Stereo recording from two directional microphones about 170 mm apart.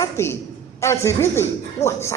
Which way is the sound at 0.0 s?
15° left (ahead or behind).